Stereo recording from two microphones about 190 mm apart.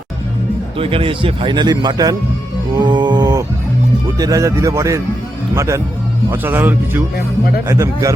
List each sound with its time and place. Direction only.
0.8 s speech: 30° right (ahead or behind)